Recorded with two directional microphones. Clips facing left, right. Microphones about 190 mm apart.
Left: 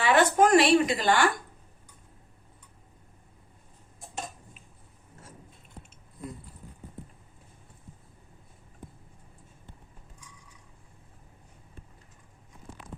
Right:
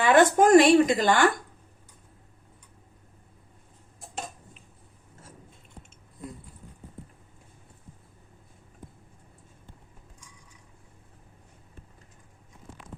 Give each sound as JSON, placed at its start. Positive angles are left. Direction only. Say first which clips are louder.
{"t": 0.0, "sound": "speech", "louder": "right 3 dB", "side_deg": -45}